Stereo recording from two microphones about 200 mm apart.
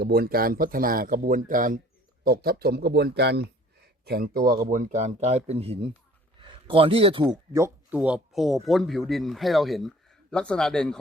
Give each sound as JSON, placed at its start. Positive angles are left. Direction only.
{"t": 0.0, "sound": "a man's voice", "side_deg": -50}
{"t": 7.5, "sound": "speech", "side_deg": -10}